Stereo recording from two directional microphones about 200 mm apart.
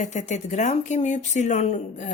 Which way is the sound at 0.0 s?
35° left (ahead or behind).